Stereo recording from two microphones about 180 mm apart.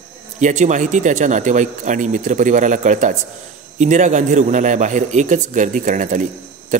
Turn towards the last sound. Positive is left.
turn(degrees=-45)  # may be behind; listen again after turning